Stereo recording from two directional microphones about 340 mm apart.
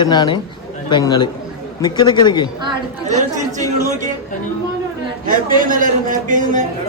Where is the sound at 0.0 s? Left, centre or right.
Centre.